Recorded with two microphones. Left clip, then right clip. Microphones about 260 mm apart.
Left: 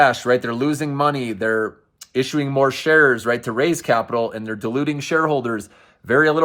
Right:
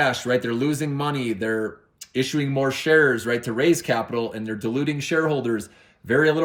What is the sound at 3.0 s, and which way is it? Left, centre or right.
Speech, centre.